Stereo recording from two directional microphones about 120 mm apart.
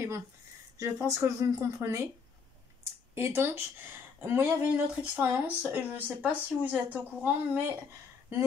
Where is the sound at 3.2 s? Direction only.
20° right (ahead or behind).